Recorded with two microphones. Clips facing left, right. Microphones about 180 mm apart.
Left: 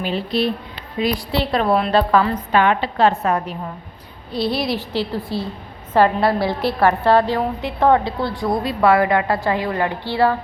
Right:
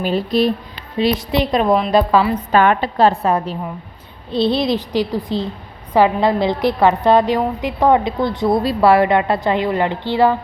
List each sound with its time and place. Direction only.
0.0 s speech: 45° right (ahead or behind)
0.9 s a woman's voice: 25° right (ahead or behind)
2.5 s a woman's voice: 45° right (ahead or behind); by 8.4 s 20° right (ahead or behind)
8.6 s a woman's voice: 30° right (ahead or behind)